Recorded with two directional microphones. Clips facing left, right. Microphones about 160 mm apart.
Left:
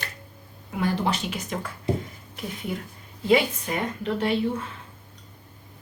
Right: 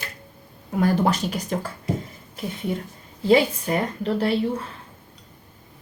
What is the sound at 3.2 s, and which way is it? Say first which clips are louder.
Speech: right 3 dB; 35° right (ahead or behind).